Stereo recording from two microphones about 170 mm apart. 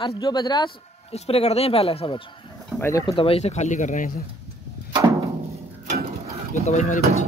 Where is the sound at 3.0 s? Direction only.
35° left (ahead or behind).